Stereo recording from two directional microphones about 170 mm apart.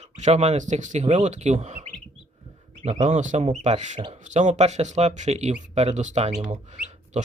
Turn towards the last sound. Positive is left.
turn(degrees=-45)  # may be behind; listen again after turning